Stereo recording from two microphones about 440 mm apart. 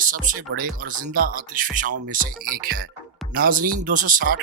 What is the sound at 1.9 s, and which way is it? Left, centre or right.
Speech, right.